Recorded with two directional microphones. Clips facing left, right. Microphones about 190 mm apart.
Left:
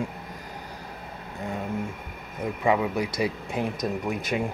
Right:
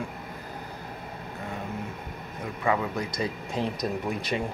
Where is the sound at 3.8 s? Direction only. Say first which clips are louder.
Left 1 dB; centre (ahead or behind).